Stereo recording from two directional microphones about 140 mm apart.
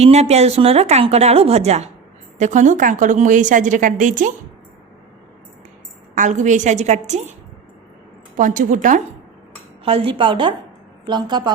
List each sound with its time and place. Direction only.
0.0 s speech: 50° right (ahead or behind)
2.4 s a woman's voice: 60° right (ahead or behind)
6.1 s a woman's voice: 60° right (ahead or behind)
8.4 s a woman's voice: 70° right (ahead or behind)
9.8 s a woman's voice: 40° right (ahead or behind)